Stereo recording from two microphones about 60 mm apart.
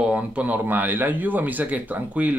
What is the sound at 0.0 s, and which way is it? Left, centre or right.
Speech, right.